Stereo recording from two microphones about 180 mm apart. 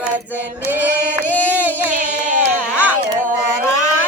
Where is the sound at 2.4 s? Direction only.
10° right (ahead or behind).